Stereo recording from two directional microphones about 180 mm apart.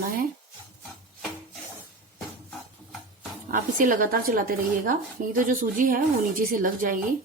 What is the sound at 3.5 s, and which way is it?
Speech, 50° right (ahead or behind).